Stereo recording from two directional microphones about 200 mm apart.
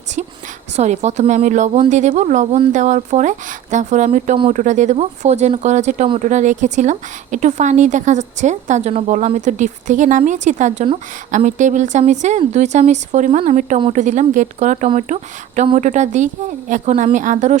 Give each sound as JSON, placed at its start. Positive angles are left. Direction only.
{"t": 0.8, "sound": "speech", "side_deg": -35}